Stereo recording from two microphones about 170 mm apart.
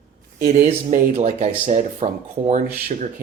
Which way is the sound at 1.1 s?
40° right (ahead or behind).